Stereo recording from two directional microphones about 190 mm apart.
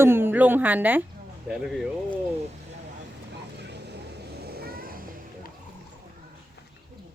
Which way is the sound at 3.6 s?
60° right (ahead or behind).